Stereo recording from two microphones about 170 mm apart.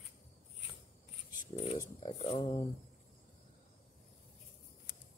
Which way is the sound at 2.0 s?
35° left (ahead or behind).